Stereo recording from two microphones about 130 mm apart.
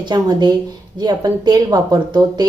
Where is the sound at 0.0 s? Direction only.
35° right (ahead or behind).